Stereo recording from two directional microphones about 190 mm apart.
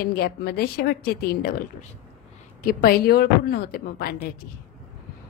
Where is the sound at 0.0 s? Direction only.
55° left (ahead or behind).